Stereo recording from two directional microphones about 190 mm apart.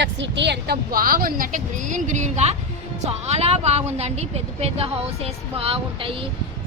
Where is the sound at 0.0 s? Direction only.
70° right (ahead or behind).